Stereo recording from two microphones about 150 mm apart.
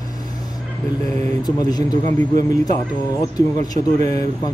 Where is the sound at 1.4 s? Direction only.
25° left (ahead or behind).